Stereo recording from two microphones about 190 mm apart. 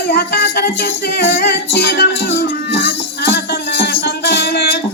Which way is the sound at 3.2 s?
55° left (ahead or behind).